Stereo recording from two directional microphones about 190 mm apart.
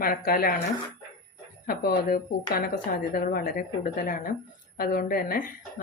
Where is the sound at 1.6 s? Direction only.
50° left (ahead or behind).